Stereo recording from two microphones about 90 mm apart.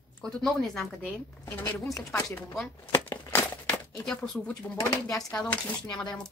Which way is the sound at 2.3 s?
25° left (ahead or behind).